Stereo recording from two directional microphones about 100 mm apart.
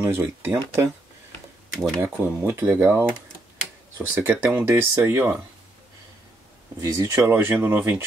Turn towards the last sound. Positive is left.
turn(degrees=-20)  # may be behind; listen again after turning